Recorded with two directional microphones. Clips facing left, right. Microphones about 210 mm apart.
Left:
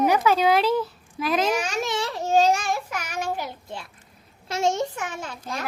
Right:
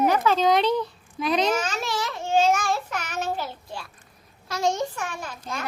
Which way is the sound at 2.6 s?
10° left (ahead or behind).